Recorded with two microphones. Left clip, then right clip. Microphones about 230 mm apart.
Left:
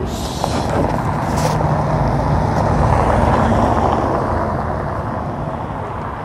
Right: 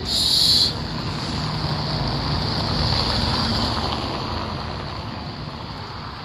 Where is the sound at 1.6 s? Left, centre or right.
Centre.